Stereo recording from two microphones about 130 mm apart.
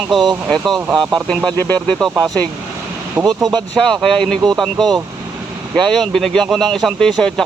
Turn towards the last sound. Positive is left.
turn(degrees=5)  # may be behind; listen again after turning